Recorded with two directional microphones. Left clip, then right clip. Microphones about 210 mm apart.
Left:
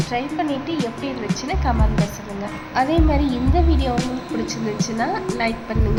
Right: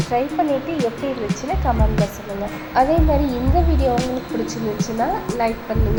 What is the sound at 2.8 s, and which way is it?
Speech, 15° right (ahead or behind).